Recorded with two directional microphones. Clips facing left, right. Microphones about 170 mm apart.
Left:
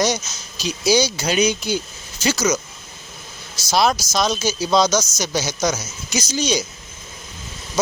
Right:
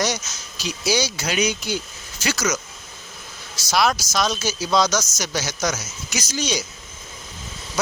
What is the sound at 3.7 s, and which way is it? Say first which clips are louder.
Speech: left 2 dB; 25° left (ahead or behind).